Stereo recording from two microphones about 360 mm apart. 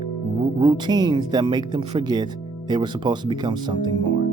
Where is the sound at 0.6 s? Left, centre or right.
Centre.